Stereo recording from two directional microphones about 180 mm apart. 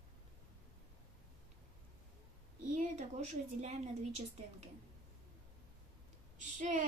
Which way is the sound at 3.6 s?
40° right (ahead or behind).